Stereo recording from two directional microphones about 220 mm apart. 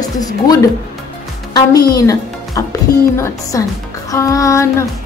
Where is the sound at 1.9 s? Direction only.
15° left (ahead or behind).